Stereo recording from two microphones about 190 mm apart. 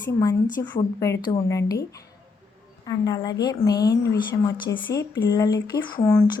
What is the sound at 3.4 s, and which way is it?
A woman's voice, 20° left (ahead or behind).